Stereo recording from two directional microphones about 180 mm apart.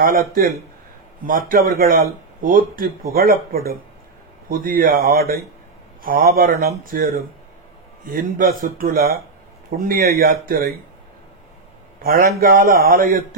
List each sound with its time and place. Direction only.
0.0 s a man's voice: 55° right (ahead or behind)
12.0 s a man's voice: 55° right (ahead or behind)